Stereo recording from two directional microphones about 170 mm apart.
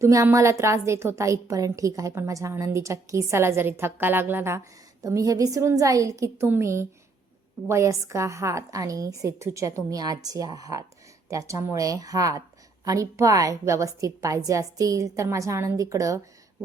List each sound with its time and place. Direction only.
0.0 s a woman's voice: 15° right (ahead or behind)